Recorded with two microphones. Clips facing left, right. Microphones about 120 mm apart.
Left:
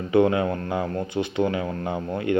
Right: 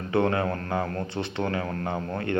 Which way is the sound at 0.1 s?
15° left (ahead or behind).